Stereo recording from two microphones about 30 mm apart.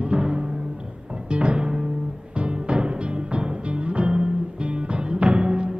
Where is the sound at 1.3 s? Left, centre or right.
Right.